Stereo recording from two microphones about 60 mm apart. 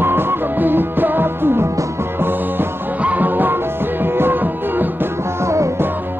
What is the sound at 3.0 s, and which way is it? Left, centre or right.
Music, right.